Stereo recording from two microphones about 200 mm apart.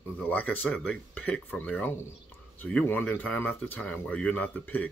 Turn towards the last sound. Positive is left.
turn(degrees=10)  # may be behind; listen again after turning